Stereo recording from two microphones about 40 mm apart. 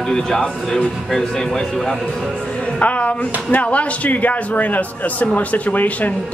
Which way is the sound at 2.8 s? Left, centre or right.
Left.